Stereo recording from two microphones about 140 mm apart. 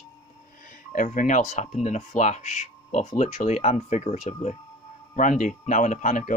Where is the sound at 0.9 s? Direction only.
70° left (ahead or behind).